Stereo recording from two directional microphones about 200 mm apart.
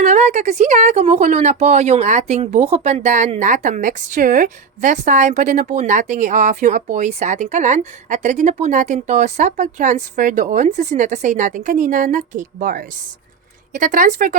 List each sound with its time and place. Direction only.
0.0 s speech: 35° right (ahead or behind)